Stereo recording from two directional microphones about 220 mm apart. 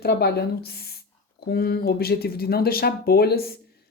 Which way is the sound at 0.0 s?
45° left (ahead or behind).